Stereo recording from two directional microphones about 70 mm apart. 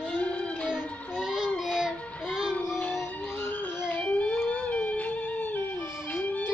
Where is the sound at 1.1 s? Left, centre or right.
Centre.